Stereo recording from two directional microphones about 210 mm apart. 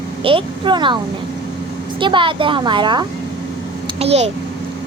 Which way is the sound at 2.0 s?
25° right (ahead or behind).